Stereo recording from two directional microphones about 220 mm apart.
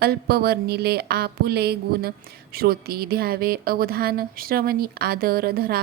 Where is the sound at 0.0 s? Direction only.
45° right (ahead or behind).